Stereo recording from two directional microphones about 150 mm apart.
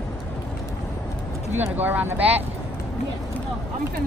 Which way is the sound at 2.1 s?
40° right (ahead or behind).